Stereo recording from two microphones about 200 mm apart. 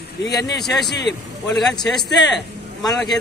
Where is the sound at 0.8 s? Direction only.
60° left (ahead or behind).